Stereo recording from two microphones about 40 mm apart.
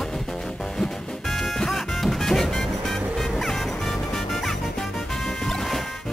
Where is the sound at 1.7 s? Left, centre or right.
Centre.